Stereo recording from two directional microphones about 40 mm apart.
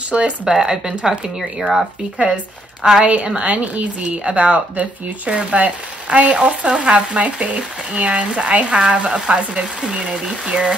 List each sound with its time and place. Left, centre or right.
0.1 s speech: centre
2.8 s speech: centre
3.4 s speech: right